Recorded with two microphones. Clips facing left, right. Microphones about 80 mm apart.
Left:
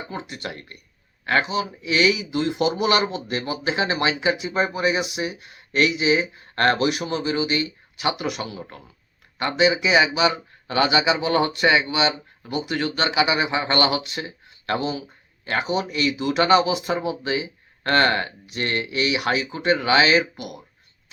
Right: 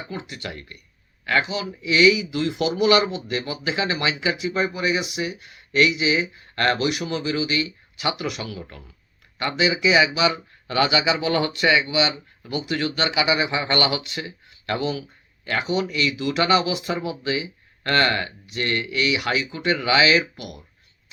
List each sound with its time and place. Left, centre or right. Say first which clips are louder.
0.1 s speech: left 1 dB; left